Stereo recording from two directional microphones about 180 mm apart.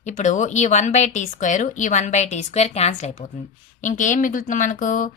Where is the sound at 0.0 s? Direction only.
45° left (ahead or behind).